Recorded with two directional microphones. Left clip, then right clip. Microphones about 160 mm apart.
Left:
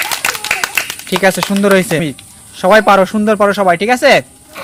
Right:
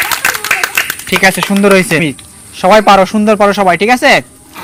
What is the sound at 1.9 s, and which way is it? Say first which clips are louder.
A man's voice: right 4 dB; 15° left (ahead or behind).